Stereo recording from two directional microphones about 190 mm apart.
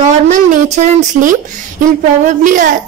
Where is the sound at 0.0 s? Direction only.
40° right (ahead or behind).